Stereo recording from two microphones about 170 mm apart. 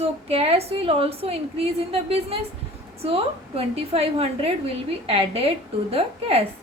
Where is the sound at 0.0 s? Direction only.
35° right (ahead or behind).